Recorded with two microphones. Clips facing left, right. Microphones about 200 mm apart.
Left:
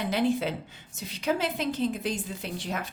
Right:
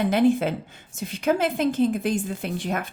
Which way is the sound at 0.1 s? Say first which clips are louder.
Right 4 dB; 50° right (ahead or behind).